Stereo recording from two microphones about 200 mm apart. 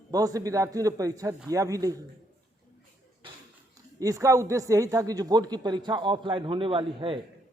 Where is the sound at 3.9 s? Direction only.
15° right (ahead or behind).